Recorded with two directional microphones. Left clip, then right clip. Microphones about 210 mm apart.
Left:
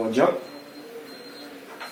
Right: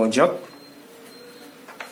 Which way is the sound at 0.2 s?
45° right (ahead or behind).